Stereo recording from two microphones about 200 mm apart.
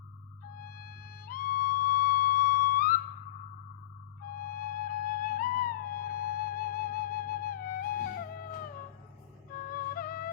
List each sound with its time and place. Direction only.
0.6 s music: 45° left (ahead or behind)
4.4 s music: 45° left (ahead or behind)
9.6 s music: 45° left (ahead or behind)